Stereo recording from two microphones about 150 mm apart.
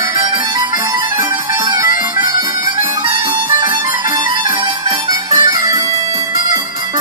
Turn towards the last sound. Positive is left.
turn(degrees=-25)  # may be behind; listen again after turning